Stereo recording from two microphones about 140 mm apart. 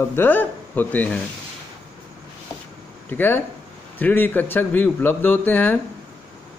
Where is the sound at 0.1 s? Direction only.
15° left (ahead or behind).